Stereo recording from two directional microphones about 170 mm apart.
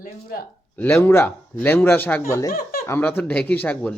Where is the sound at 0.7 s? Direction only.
15° left (ahead or behind).